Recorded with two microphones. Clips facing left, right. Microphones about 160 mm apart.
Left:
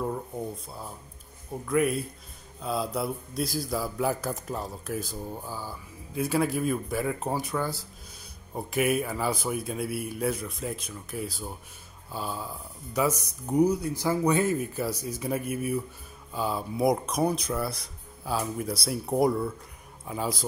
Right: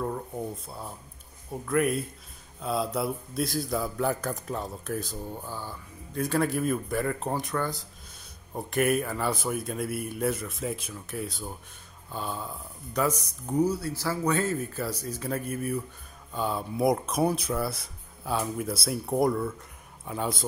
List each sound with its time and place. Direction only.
0.7 s speech: centre (ahead or behind)
13.5 s speech: 15° left (ahead or behind)